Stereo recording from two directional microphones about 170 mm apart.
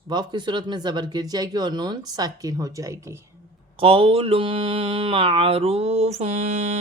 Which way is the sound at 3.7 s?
35° right (ahead or behind).